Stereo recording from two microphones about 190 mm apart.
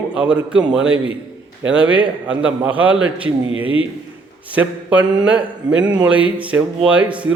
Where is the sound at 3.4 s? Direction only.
90° right.